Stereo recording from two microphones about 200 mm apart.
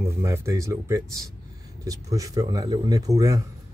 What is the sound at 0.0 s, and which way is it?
Speech, 15° right (ahead or behind).